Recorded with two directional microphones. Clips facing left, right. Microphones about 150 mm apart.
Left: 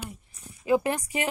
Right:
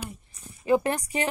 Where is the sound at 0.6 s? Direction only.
10° left (ahead or behind).